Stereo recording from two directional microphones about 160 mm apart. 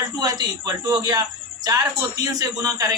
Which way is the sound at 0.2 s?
25° right (ahead or behind).